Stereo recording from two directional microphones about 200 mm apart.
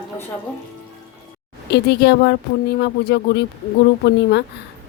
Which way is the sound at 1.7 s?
60° left (ahead or behind).